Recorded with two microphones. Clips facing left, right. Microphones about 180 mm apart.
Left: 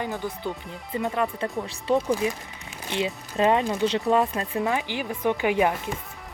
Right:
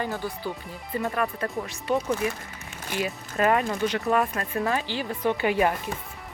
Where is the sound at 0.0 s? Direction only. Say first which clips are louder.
Even; 20° left (ahead or behind).